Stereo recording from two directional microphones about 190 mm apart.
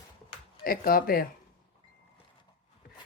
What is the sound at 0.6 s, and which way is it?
Speech, 50° left (ahead or behind).